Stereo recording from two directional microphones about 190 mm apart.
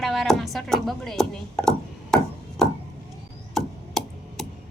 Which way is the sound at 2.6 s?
Centre (ahead or behind).